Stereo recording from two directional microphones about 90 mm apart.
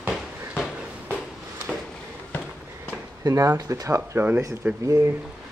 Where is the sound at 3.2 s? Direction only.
35° right (ahead or behind).